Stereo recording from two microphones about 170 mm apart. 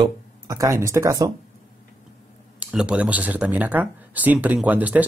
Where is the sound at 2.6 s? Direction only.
5° right (ahead or behind).